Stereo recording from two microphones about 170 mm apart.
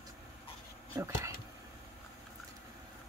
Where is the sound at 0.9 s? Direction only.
15° right (ahead or behind).